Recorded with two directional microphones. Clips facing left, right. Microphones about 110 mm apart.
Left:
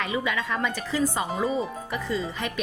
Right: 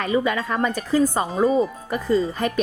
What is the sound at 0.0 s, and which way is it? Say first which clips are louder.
Speech: right 6 dB; 45° right (ahead or behind).